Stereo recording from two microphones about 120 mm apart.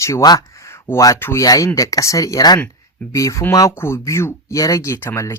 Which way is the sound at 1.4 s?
30° left (ahead or behind).